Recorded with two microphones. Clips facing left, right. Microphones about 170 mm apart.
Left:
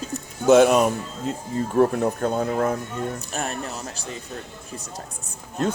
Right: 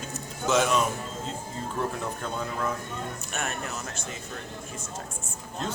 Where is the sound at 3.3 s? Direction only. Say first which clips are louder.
Left 4 dB; 35° left (ahead or behind).